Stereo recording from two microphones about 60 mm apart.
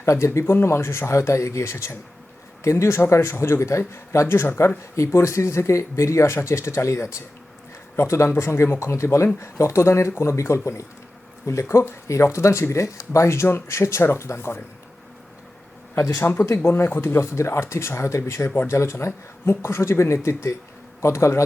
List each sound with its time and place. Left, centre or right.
0.0 s speech: left
0.3 s speech: left
16.0 s speech: left
16.2 s speech: left